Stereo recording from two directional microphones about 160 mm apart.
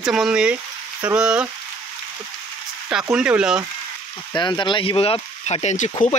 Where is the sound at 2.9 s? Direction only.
5° right (ahead or behind).